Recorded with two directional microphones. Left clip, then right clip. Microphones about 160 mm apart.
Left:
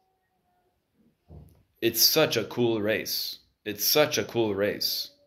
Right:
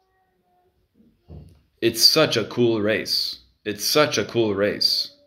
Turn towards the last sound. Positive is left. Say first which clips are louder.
# right 7 dB
turn(degrees=-10)  # may be behind; listen again after turning